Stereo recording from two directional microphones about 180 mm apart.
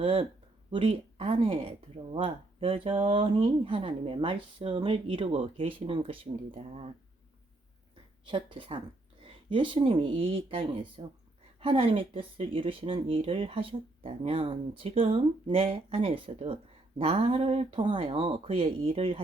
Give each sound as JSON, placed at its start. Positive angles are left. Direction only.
{"t": 0.0, "sound": "speech", "side_deg": -30}
{"t": 8.3, "sound": "speech", "side_deg": -25}